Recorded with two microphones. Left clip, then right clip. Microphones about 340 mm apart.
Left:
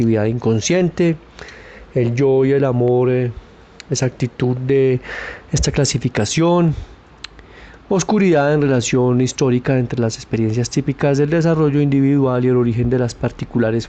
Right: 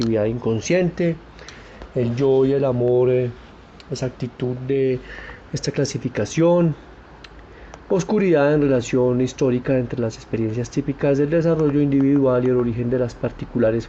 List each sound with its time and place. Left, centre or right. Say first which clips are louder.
0.3 s speech: left 3 dB; left
7.9 s speech: left 3 dB; left